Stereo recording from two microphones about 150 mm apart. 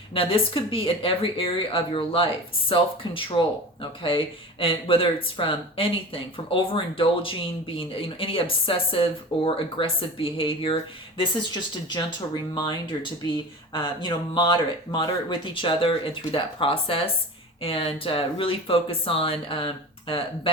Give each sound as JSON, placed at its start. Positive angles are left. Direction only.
{"t": 0.1, "sound": "speech", "side_deg": 35}